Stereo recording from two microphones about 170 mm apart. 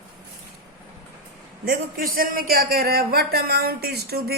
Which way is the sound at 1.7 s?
60° right (ahead or behind).